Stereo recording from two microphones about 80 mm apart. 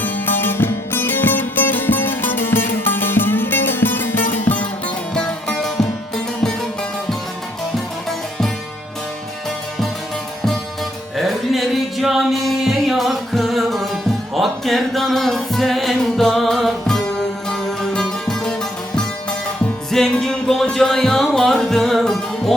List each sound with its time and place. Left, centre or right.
0.0 s music: left
5.1 s music: centre
11.2 s music: centre
19.9 s music: centre